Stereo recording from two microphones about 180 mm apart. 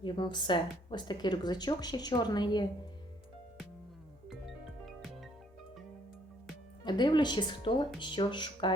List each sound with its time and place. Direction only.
0.0 s speech: 25° left (ahead or behind)
4.3 s music: centre (ahead or behind)
6.8 s speech: 25° left (ahead or behind)